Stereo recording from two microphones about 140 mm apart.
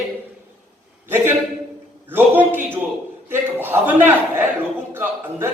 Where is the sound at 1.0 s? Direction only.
15° right (ahead or behind).